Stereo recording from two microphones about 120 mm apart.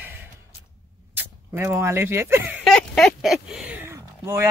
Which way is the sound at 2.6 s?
5° left (ahead or behind).